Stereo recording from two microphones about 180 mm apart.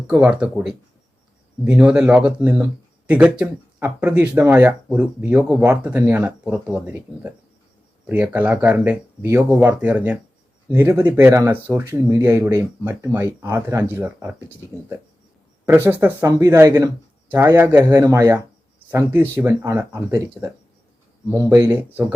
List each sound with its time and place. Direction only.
0.1 s speech: 5° right (ahead or behind)
15.6 s speech: 10° right (ahead or behind)